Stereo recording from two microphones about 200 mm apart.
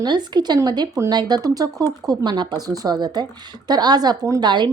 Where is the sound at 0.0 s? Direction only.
20° right (ahead or behind).